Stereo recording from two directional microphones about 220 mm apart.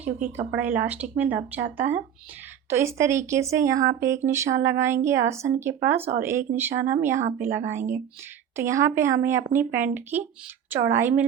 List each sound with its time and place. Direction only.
0.0 s speech: 30° right (ahead or behind)
0.5 s speech: 5° right (ahead or behind)